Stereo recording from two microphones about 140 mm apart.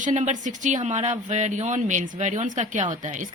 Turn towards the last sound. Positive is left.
turn(degrees=-60)  # may be behind; listen again after turning